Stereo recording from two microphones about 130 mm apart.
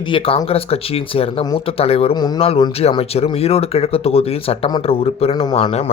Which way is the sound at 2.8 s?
50° left (ahead or behind).